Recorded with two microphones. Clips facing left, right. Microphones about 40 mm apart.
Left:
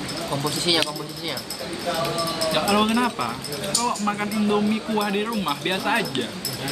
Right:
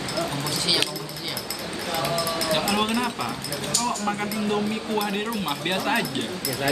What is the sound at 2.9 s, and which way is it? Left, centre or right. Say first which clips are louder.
Speech: left 3 dB; centre.